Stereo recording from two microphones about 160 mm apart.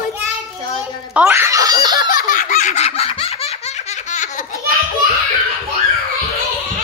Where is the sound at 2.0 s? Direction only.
60° left (ahead or behind).